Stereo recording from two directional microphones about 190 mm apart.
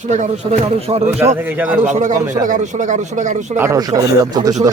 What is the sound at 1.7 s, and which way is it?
Speech, 40° right (ahead or behind).